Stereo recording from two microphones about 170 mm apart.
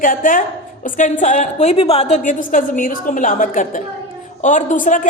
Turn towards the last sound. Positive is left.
turn(degrees=50)  # may be behind; listen again after turning